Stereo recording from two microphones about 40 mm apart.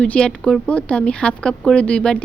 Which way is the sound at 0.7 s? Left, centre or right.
Left.